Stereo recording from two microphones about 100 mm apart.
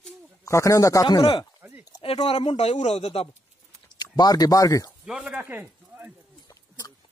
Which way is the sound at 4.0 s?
40° left (ahead or behind).